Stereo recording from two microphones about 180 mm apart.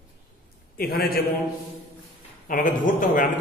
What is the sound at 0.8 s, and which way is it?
Speech, 55° left (ahead or behind).